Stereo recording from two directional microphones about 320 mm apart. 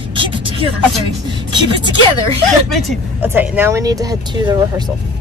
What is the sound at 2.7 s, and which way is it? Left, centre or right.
Speech, centre.